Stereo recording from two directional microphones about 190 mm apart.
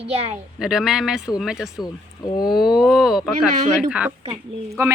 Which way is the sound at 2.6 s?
Centre (ahead or behind).